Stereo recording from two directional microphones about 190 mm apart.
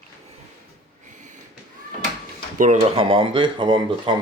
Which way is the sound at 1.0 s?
40° right (ahead or behind).